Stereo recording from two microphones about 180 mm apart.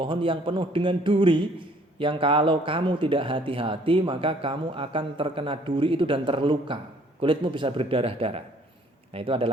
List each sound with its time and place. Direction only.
0.0 s a man's voice: 30° right (ahead or behind)